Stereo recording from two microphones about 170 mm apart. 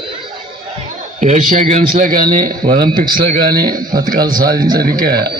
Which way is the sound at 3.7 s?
55° right (ahead or behind).